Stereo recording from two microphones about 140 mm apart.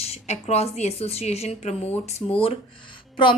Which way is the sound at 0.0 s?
50° left (ahead or behind).